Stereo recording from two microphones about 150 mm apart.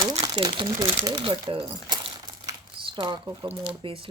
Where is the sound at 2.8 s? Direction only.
30° right (ahead or behind).